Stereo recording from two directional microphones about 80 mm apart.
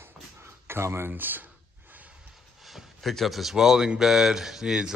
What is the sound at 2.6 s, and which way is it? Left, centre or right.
Speech, centre.